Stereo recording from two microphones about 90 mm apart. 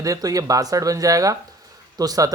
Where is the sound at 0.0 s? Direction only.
40° right (ahead or behind).